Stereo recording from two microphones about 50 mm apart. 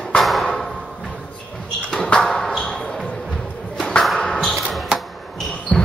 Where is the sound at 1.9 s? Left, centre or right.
Centre.